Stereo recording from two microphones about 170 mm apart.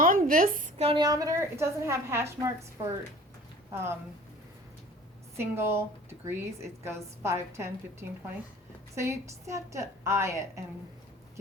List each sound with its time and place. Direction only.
0.0 s a sound: 55° right (ahead or behind)
0.8 s speech: 35° right (ahead or behind)
1.0 s a woman's voice: 20° right (ahead or behind)
3.7 s speech: 15° right (ahead or behind)
5.4 s a woman's voice: 15° right (ahead or behind)